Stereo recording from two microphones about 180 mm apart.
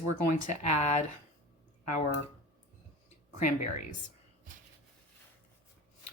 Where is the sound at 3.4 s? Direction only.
45° left (ahead or behind).